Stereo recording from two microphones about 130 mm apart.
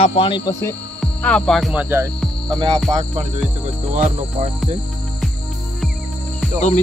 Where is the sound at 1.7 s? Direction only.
15° right (ahead or behind).